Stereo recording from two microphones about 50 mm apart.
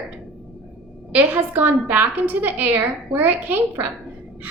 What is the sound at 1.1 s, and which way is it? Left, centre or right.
A woman's voice, right.